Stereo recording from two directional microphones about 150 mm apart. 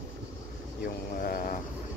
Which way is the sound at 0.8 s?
70° left (ahead or behind).